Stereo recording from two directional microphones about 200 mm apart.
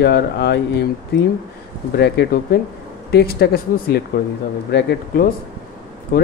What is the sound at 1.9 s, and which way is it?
Speech, 55° left (ahead or behind).